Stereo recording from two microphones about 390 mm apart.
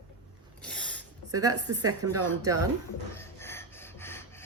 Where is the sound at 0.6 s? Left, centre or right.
Centre.